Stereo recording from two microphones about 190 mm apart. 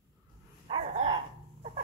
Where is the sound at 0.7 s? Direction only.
25° right (ahead or behind).